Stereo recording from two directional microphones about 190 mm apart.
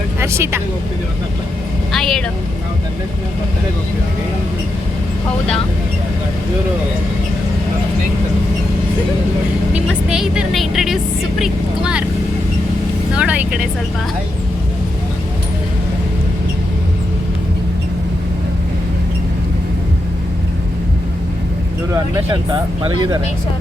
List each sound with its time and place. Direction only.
0.2 s speech: 15° right (ahead or behind)
1.9 s speech: centre (ahead or behind)
10.1 s speech: centre (ahead or behind)
13.1 s speech: 5° right (ahead or behind)
22.1 s speech: 20° right (ahead or behind)